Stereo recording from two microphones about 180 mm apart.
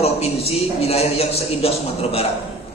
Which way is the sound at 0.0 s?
35° left (ahead or behind).